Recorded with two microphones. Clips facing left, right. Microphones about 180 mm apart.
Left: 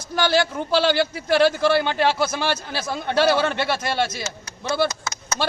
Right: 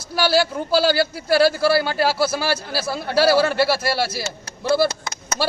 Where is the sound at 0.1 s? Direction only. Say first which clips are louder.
Right 1 dB; 10° right (ahead or behind).